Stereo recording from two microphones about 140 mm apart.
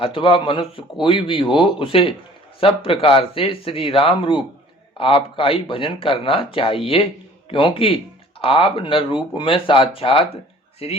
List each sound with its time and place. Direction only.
0.0 s speech: 40° left (ahead or behind)